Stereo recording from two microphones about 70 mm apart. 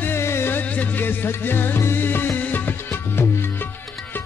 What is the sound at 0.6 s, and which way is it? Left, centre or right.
Music, left.